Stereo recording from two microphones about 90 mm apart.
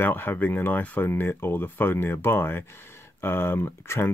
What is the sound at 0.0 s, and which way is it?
Speech, 20° left (ahead or behind).